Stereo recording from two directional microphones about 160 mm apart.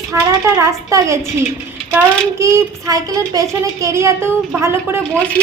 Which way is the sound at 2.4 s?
15° right (ahead or behind).